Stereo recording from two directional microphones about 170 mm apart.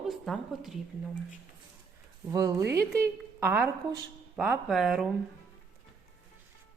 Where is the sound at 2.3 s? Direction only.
20° right (ahead or behind); by 5.1 s centre (ahead or behind).